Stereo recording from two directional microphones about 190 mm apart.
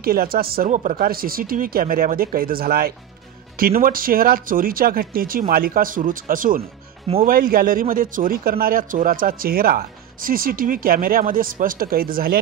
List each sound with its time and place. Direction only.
0.0 s a man's voice: 50° right (ahead or behind)